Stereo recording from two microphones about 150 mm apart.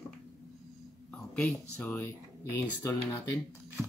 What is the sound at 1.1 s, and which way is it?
Speech, 5° left (ahead or behind).